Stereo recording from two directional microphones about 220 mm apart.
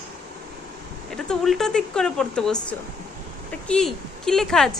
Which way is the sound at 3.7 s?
5° left (ahead or behind).